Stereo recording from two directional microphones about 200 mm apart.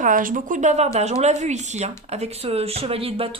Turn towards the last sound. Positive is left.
turn(degrees=-30)  # may be behind; listen again after turning